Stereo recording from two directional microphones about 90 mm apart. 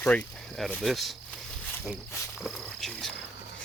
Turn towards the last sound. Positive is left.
turn(degrees=5)  # may be behind; listen again after turning